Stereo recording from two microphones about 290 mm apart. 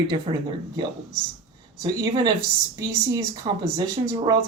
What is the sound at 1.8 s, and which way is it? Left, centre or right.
Speech, centre.